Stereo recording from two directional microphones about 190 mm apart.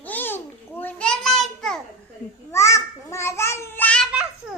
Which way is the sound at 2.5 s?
15° left (ahead or behind).